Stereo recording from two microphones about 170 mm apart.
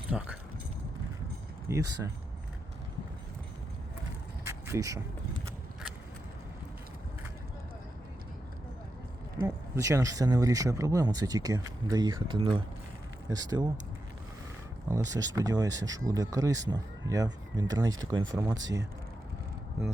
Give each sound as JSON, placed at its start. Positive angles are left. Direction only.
{"t": 0.1, "sound": "speech", "side_deg": -10}
{"t": 1.7, "sound": "speech", "side_deg": -15}
{"t": 4.4, "sound": "vehicle", "side_deg": -15}
{"t": 9.4, "sound": "speech", "side_deg": -20}
{"t": 14.8, "sound": "speech", "side_deg": -20}